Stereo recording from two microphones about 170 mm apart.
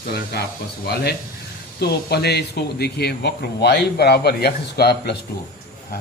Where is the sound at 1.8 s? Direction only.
70° left (ahead or behind).